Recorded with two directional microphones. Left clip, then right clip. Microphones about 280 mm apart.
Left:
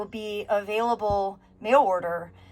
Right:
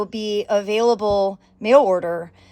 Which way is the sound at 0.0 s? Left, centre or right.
Right.